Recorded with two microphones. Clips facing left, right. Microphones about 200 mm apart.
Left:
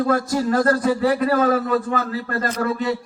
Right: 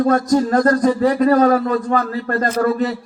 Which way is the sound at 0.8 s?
40° right (ahead or behind).